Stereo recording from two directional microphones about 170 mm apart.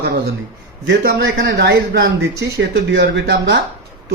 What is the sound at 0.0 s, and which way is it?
Speech, 65° right (ahead or behind).